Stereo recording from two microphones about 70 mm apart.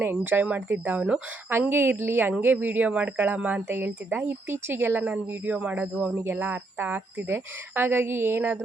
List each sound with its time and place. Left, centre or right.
0.0 s speech: right
1.7 s speech: right
5.0 s speech: right